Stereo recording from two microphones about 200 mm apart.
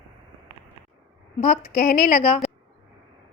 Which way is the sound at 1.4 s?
35° left (ahead or behind).